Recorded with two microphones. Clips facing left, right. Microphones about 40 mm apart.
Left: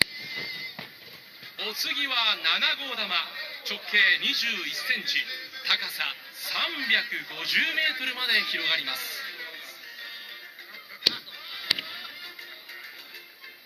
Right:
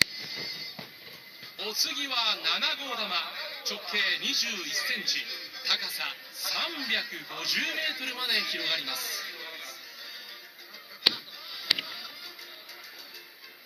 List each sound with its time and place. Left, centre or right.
0.2 s a sound: left
1.5 s a man's voice: left
11.1 s honk: left